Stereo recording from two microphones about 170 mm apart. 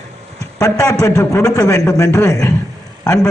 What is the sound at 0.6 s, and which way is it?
A man's voice, 15° left (ahead or behind).